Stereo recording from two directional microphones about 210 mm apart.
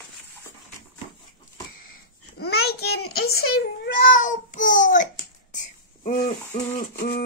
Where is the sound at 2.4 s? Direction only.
50° left (ahead or behind).